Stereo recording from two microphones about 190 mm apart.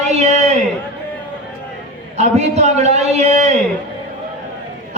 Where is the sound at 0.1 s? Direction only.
35° right (ahead or behind).